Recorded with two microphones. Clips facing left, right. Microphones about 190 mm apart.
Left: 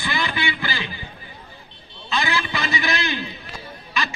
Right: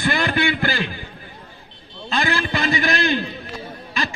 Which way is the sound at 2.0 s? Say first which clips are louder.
Right 2 dB; 50° right (ahead or behind).